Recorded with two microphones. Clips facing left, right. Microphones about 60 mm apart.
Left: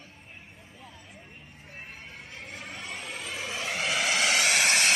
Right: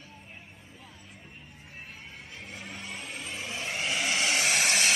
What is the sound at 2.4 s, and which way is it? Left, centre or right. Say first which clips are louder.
Vehicle: left 1 dB; left.